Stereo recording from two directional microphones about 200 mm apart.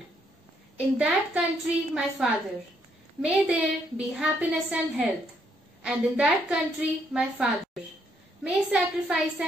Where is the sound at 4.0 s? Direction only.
5° right (ahead or behind).